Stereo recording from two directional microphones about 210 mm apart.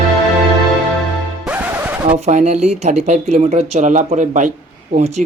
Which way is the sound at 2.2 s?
30° right (ahead or behind).